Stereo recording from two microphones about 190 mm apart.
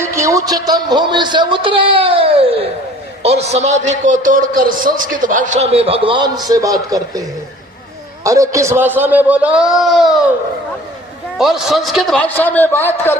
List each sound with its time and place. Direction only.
0.0 s a man's voice: 15° right (ahead or behind)
11.3 s a man's voice: centre (ahead or behind)